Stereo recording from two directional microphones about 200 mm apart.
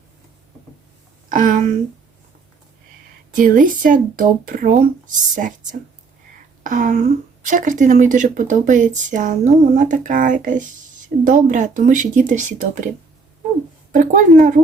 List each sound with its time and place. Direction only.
1.3 s a sound: 40° right (ahead or behind)
3.3 s speech: 40° right (ahead or behind)
13.9 s speech: 40° right (ahead or behind)